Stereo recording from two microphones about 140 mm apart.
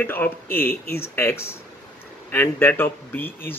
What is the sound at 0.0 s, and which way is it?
Speech, 15° left (ahead or behind).